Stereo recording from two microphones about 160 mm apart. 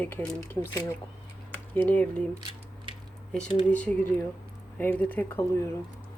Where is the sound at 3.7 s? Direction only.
10° left (ahead or behind).